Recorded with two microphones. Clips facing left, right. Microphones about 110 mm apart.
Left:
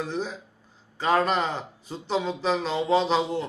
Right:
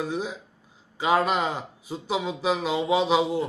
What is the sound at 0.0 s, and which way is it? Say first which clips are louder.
Speech: right 1 dB; 5° right (ahead or behind).